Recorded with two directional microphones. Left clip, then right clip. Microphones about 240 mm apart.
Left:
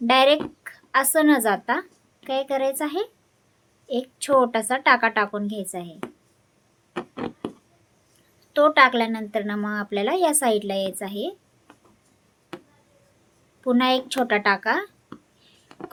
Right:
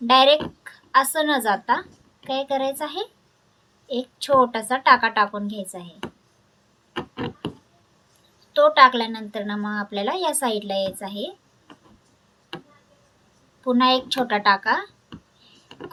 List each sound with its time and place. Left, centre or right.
0.1 s a woman's voice: left
6.9 s a sound: centre
8.5 s a woman's voice: left
13.7 s a woman's voice: left